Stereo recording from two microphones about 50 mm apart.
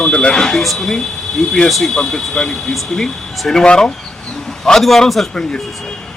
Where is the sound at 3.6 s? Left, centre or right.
Centre.